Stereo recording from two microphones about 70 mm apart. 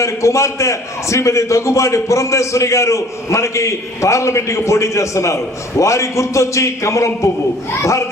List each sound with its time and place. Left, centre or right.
0.0 s a man's voice: left